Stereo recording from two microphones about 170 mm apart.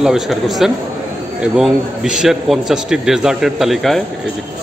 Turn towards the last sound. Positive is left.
turn(degrees=0)  # may be behind; listen again after turning